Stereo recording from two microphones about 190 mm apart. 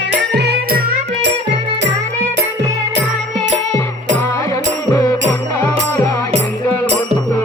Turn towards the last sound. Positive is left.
turn(degrees=15)  # may be behind; listen again after turning